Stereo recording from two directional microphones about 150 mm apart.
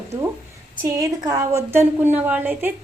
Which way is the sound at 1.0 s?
20° right (ahead or behind).